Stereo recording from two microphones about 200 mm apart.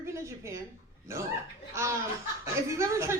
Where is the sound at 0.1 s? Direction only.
15° right (ahead or behind).